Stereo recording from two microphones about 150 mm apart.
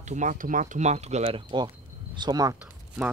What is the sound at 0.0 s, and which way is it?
Speech, 55° right (ahead or behind).